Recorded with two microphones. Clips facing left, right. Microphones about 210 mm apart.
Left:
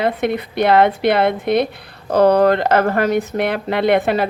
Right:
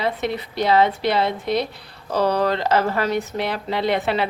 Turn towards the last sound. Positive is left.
turn(degrees=50)  # may be behind; listen again after turning